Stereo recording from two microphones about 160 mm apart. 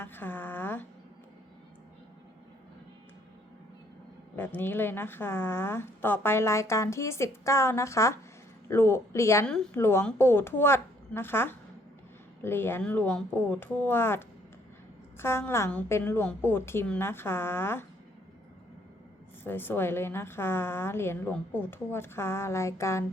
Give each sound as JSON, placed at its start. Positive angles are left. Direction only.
{"t": 0.0, "sound": "a woman's voice", "side_deg": 15}
{"t": 4.4, "sound": "a woman's voice", "side_deg": 10}
{"t": 19.5, "sound": "a woman's voice", "side_deg": 15}